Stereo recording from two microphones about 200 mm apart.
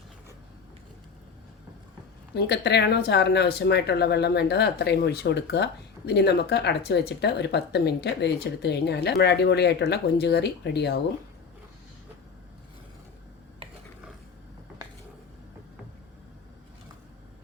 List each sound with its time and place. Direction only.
2.3 s speech: 55° left (ahead or behind)
13.6 s dishes: 25° right (ahead or behind)